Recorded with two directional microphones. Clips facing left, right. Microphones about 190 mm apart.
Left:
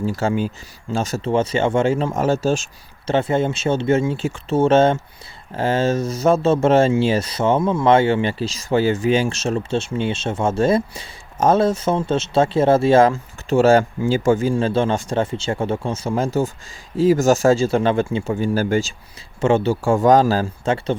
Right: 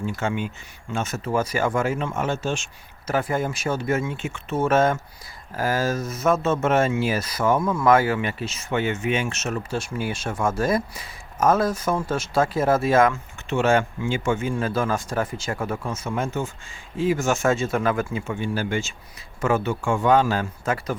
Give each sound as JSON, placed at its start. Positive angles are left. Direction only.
{"t": 0.0, "sound": "speech", "side_deg": 35}
{"t": 3.1, "sound": "speech", "side_deg": 25}
{"t": 19.4, "sound": "speech", "side_deg": 25}